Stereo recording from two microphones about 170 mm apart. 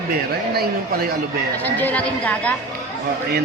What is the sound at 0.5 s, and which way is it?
Speech, 65° right (ahead or behind).